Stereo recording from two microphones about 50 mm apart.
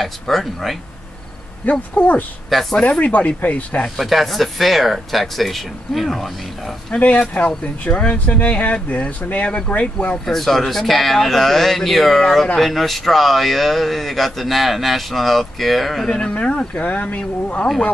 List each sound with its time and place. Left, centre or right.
0.0 s speech: centre
1.6 s speech: left
4.0 s speech: centre
7.0 s speech: left
10.2 s speech: centre
16.1 s speech: centre